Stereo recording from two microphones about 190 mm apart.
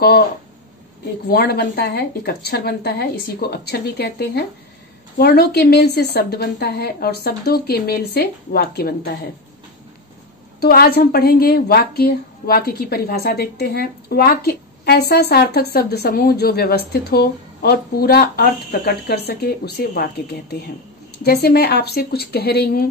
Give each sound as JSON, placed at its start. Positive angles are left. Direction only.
{"t": 1.3, "sound": "a woman's voice", "side_deg": 55}
{"t": 10.6, "sound": "a woman's voice", "side_deg": 55}